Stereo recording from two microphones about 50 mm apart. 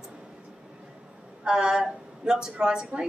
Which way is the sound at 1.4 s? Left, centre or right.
Centre.